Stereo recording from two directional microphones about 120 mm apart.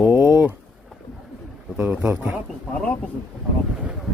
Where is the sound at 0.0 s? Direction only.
15° right (ahead or behind).